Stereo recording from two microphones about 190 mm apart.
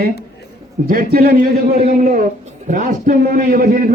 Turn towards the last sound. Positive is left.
turn(degrees=-50)  # may be behind; listen again after turning